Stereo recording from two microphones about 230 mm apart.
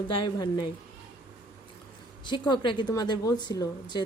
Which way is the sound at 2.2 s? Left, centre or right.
Centre.